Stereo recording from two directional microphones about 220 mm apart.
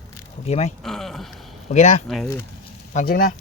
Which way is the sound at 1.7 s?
35° left (ahead or behind).